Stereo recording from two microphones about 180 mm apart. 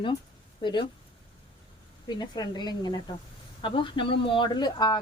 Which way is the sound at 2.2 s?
25° left (ahead or behind).